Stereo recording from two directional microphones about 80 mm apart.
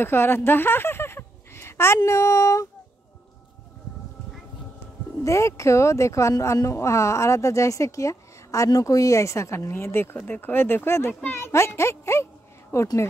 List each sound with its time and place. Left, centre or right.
0.0 s a sound: left
2.0 s a woman's voice: left
5.2 s a woman's voice: left